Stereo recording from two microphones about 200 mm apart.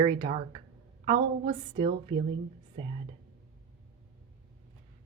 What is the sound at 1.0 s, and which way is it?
A woman's voice, 25° right (ahead or behind).